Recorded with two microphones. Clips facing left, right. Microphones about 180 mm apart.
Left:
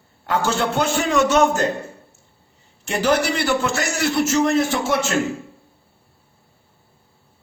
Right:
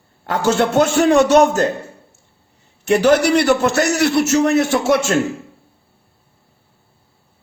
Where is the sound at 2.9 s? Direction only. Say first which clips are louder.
Right 7 dB; 70° right (ahead or behind).